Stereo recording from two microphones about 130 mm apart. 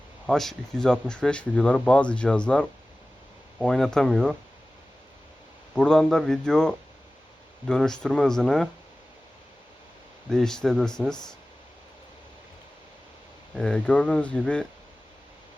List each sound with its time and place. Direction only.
0.3 s speech: centre (ahead or behind)
5.7 s speech: 5° left (ahead or behind)
10.2 s speech: 5° left (ahead or behind)
13.5 s speech: 5° left (ahead or behind)